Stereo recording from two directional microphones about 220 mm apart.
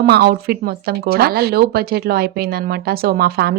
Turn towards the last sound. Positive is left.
turn(degrees=-45)  # may be behind; listen again after turning